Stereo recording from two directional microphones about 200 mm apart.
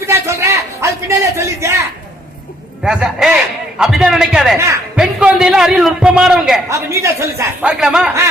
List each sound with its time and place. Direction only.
0.0 s a sound: 15° right (ahead or behind)
2.8 s a man's voice: 5° right (ahead or behind)
6.7 s a man's voice: 15° right (ahead or behind)